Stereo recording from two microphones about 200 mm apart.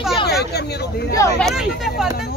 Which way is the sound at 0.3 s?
55° left (ahead or behind).